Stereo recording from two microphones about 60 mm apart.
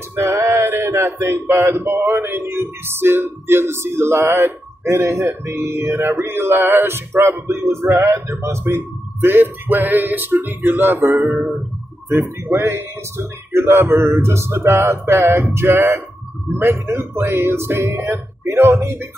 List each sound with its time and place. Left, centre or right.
0.2 s male singing: right
1.2 s speech: right